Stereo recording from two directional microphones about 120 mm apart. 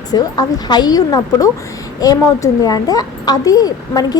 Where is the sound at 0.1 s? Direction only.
35° left (ahead or behind).